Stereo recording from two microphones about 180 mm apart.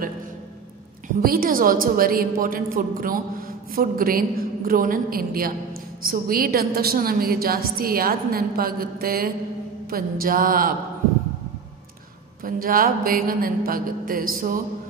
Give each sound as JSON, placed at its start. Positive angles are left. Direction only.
{"t": 1.0, "sound": "a woman's voice", "side_deg": -55}
{"t": 12.4, "sound": "a woman's voice", "side_deg": -50}